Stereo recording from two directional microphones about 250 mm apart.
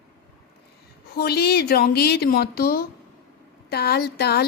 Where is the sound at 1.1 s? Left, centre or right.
Left.